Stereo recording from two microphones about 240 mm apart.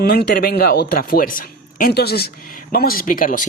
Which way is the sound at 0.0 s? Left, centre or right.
Left.